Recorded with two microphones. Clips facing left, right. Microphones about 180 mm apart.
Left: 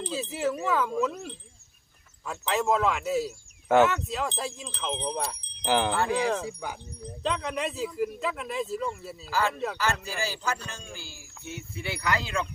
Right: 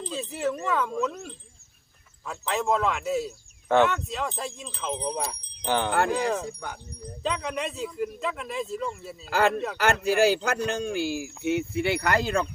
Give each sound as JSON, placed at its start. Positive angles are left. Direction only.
{"t": 0.1, "sound": "speech", "side_deg": 5}
{"t": 5.0, "sound": "wind chime", "side_deg": 0}
{"t": 6.1, "sound": "speech", "side_deg": 0}
{"t": 9.7, "sound": "speech", "side_deg": -70}